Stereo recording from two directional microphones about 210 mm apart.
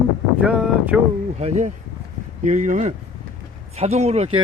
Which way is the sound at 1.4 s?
35° right (ahead or behind).